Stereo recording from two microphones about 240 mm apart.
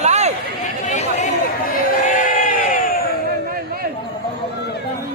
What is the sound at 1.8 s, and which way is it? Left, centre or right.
Crowd, left.